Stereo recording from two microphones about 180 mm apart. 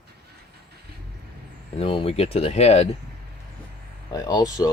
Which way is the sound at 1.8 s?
30° left (ahead or behind).